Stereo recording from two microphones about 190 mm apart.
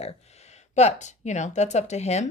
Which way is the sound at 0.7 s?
35° left (ahead or behind).